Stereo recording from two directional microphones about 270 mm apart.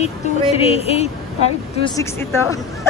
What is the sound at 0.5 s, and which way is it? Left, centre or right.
Speech, left.